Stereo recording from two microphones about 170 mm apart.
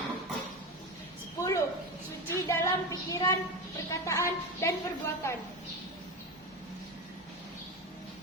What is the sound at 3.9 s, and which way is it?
Speech, 20° left (ahead or behind).